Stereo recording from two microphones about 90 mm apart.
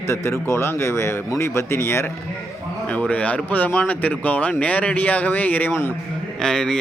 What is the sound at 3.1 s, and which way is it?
Speech, 15° left (ahead or behind).